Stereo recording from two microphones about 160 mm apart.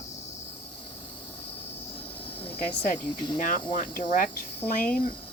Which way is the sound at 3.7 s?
55° left (ahead or behind).